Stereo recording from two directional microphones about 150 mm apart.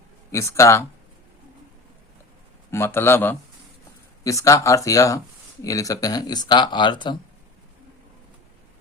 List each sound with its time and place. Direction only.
0.3 s speech: 20° left (ahead or behind)
2.6 s a man's voice: 15° left (ahead or behind)